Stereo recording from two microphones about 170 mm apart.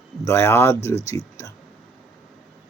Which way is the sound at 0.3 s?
15° left (ahead or behind).